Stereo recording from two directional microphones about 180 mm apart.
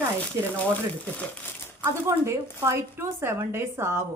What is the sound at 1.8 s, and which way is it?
Speech, 15° right (ahead or behind).